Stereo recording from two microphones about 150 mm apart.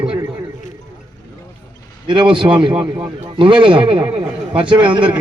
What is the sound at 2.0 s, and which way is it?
A man's voice, 30° right (ahead or behind).